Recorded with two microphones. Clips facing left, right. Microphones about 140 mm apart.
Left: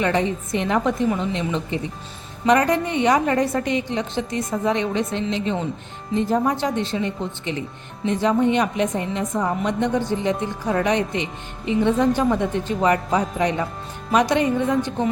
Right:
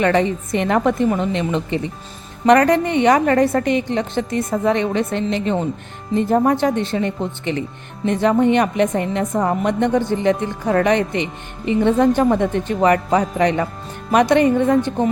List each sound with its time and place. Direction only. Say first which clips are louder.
0.0 s a woman's voice: right 4 dB; 65° right (ahead or behind)